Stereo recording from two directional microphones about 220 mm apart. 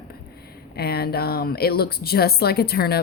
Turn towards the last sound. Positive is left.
turn(degrees=45)  # may be behind; listen again after turning